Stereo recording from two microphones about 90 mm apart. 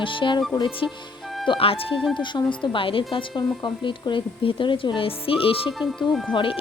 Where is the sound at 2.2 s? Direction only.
60° left (ahead or behind); by 5.7 s 90° left.